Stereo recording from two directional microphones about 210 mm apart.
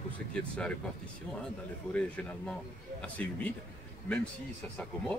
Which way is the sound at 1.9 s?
5° left (ahead or behind).